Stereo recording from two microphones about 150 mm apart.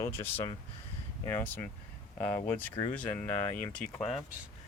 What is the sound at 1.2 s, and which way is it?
Speech, 15° left (ahead or behind).